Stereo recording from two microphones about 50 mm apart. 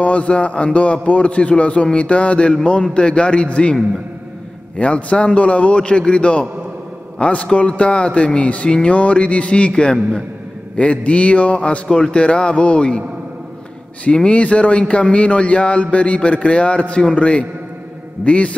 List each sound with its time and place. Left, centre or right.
0.0 s a man's voice: left
4.7 s a man's voice: left
14.0 s a man's voice: left